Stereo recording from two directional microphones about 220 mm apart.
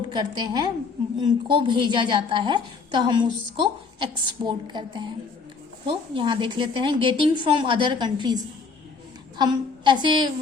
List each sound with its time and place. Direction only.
0.1 s a woman's voice: 20° right (ahead or behind)
9.4 s a woman's voice: 20° right (ahead or behind)